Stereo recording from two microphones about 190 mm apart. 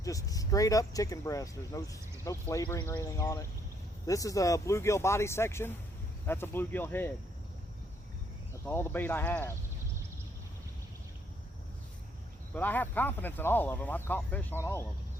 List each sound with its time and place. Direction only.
0.0 s speech: 20° left (ahead or behind)
8.6 s speech: 10° left (ahead or behind)
12.5 s speech: 10° left (ahead or behind)